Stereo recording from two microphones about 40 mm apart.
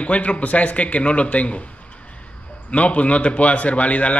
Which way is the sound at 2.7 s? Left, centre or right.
Left.